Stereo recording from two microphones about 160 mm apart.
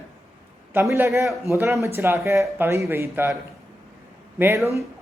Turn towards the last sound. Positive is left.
turn(degrees=-15)  # may be behind; listen again after turning